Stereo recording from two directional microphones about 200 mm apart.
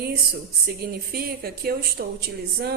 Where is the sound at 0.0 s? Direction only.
50° right (ahead or behind).